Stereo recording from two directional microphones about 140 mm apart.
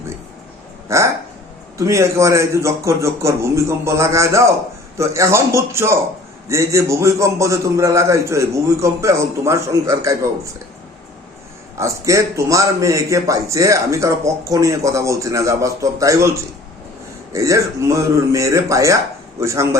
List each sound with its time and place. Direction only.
0.9 s a sound: 20° right (ahead or behind)
1.8 s a man's voice: 20° right (ahead or behind)
11.8 s a man's voice: 20° right (ahead or behind)
17.3 s a man's voice: 20° right (ahead or behind)